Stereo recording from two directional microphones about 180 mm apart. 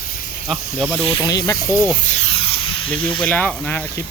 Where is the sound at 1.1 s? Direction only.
25° left (ahead or behind).